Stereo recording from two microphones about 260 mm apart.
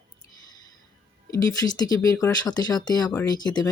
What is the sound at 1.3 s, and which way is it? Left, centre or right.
Speech, centre.